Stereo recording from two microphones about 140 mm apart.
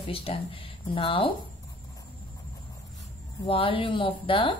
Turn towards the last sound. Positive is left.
turn(degrees=40)  # may be behind; listen again after turning